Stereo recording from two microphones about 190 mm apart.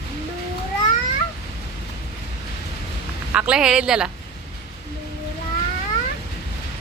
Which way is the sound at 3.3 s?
5° right (ahead or behind).